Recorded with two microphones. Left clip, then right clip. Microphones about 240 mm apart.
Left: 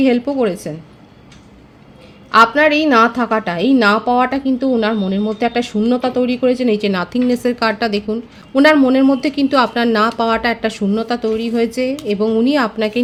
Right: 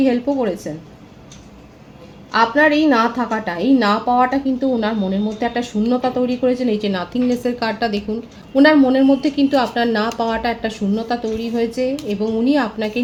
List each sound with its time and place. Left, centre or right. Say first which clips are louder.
0.0 s a woman's voice: left 3 dB; left
2.3 s a woman's voice: left 4 dB; left